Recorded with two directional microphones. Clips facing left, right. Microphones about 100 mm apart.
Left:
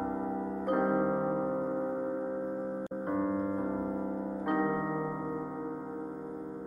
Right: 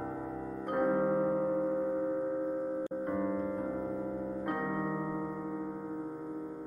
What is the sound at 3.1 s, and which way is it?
Music, 25° left (ahead or behind).